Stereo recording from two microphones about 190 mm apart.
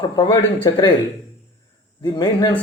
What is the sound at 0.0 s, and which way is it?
Speech, 25° left (ahead or behind).